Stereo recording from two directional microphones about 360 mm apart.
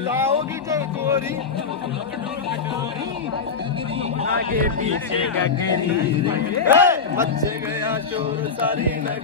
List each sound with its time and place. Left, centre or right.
0.2 s a sound: centre
4.2 s speech: right
6.2 s a man's voice: centre